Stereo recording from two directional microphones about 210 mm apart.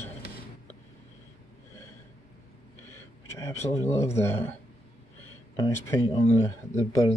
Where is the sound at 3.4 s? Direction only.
15° left (ahead or behind).